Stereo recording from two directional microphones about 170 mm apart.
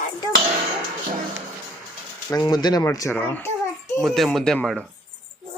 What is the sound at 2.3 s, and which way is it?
A child's voice, 25° left (ahead or behind).